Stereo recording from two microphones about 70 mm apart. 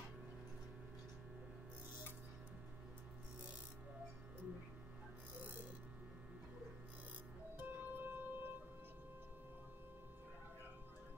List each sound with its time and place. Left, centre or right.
7.5 s music: right